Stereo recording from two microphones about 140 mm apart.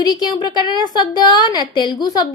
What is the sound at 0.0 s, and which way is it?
A woman's voice, 30° left (ahead or behind).